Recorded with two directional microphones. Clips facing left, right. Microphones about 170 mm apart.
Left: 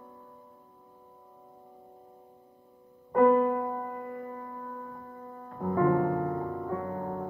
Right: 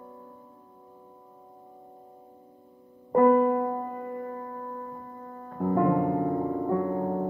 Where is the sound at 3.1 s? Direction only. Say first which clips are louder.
Right 2 dB; 15° right (ahead or behind).